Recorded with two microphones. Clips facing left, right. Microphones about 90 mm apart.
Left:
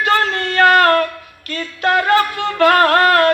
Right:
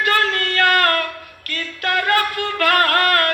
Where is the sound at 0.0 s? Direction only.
20° left (ahead or behind).